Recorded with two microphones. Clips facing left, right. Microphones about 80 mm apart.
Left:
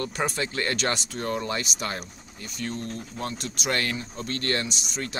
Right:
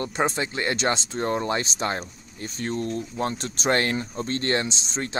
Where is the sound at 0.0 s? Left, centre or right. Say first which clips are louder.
Right 3 dB; right.